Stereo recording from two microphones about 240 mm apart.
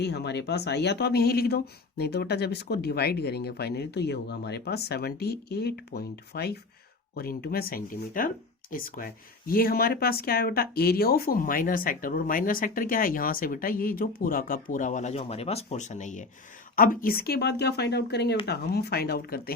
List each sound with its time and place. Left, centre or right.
0.0 s speech: left